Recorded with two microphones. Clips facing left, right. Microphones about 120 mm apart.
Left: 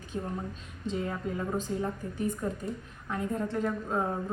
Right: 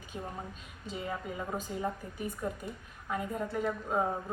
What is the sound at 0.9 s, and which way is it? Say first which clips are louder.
A woman's voice: left 5 dB; 5° right (ahead or behind).